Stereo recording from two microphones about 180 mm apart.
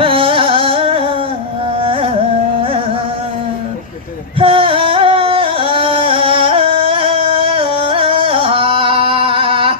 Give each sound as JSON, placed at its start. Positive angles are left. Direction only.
{"t": 0.0, "sound": "music", "side_deg": -30}
{"t": 1.8, "sound": "carnatic music", "side_deg": -30}
{"t": 4.4, "sound": "music", "side_deg": -30}